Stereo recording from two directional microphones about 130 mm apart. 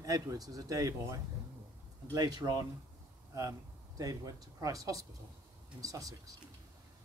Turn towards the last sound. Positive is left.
turn(degrees=-25)  # may be behind; listen again after turning